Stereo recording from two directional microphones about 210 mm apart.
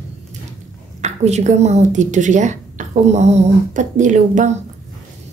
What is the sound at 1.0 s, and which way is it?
Speech, 35° right (ahead or behind).